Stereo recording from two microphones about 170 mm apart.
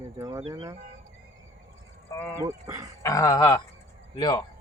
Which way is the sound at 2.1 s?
20° left (ahead or behind).